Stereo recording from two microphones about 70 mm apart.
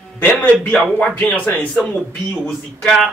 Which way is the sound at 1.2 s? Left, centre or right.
Centre.